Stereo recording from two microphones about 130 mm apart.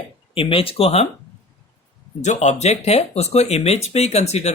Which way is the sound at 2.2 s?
65° left (ahead or behind).